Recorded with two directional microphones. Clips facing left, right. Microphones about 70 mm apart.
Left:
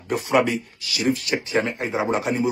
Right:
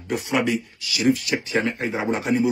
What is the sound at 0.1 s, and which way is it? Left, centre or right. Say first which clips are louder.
A man's voice: left 2 dB; left.